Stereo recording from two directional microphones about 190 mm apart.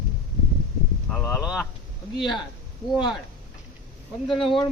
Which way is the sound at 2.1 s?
25° left (ahead or behind).